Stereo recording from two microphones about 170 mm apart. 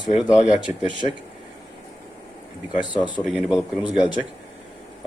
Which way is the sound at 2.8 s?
5° right (ahead or behind).